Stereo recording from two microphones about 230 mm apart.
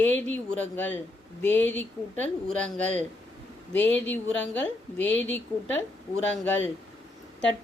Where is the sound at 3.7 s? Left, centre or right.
Left.